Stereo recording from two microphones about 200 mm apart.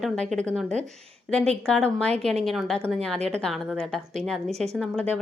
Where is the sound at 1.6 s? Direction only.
5° left (ahead or behind).